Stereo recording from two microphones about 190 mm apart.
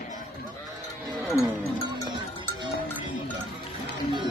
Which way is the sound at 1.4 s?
15° left (ahead or behind).